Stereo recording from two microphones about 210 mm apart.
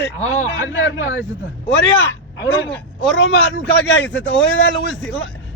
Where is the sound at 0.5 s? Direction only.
60° left (ahead or behind).